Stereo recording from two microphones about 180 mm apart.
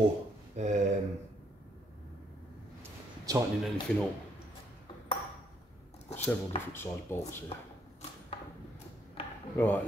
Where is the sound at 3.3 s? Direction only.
20° right (ahead or behind).